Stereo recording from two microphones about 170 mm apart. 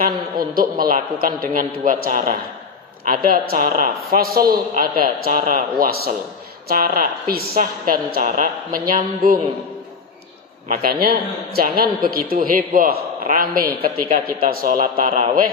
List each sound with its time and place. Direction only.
0.0 s a man's voice: 60° right (ahead or behind)
10.7 s a man's voice: 60° right (ahead or behind)